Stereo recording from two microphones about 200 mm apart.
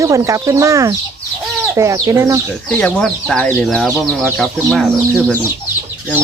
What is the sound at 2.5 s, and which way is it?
Speech, 5° left (ahead or behind).